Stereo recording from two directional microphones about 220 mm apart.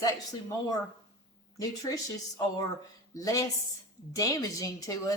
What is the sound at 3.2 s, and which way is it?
Speech, 15° left (ahead or behind).